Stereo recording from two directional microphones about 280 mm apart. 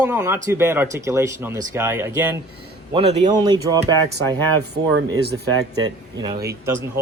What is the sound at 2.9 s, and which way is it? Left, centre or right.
Speech, right.